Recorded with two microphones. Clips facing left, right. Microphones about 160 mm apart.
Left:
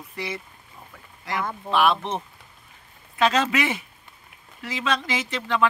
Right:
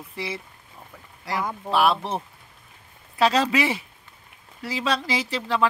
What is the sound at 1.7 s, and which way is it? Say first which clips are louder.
Speech: even; 35° right (ahead or behind).